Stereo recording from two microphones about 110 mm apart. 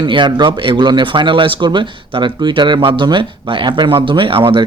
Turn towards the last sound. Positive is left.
turn(degrees=-55)  # may be behind; listen again after turning